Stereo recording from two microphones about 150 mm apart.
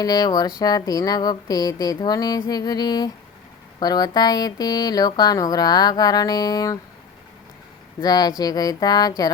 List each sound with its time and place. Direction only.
0.0 s speech: 25° left (ahead or behind)
8.0 s speech: 25° left (ahead or behind)